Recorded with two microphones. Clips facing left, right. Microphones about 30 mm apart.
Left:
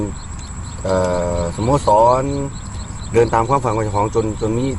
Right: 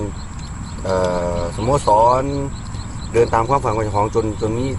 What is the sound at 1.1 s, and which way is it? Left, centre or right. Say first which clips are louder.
Speech: left 1 dB; centre.